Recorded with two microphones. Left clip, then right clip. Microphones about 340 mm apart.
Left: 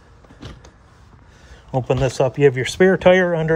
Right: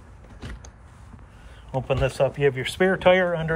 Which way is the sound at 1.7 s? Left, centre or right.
Left.